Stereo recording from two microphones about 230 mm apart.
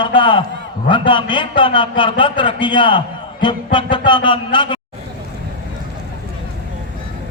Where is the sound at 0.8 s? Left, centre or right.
Left.